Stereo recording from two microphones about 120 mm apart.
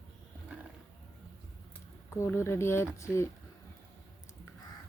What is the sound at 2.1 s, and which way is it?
Speech, 20° left (ahead or behind).